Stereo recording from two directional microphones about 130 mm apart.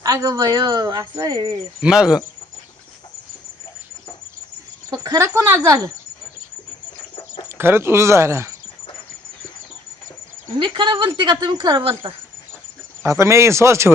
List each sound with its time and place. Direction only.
0.0 s speech: 25° right (ahead or behind)
1.8 s speech: 5° right (ahead or behind)
4.9 s speech: 25° right (ahead or behind)
7.4 s speech: 20° right (ahead or behind)
10.6 s speech: 40° right (ahead or behind)
13.0 s speech: 20° right (ahead or behind)